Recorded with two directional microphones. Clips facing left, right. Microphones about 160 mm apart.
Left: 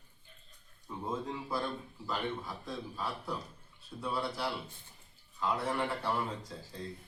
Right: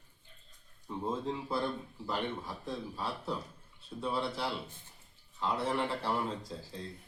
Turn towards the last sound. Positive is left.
turn(degrees=-25)  # may be behind; listen again after turning